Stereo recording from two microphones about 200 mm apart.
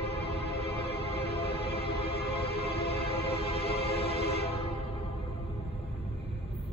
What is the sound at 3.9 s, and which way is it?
Train, 30° left (ahead or behind).